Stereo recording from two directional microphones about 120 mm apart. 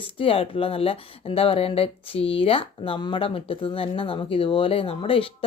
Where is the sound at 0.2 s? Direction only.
50° left (ahead or behind).